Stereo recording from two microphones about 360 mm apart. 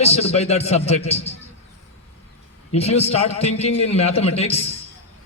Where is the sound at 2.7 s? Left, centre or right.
Centre.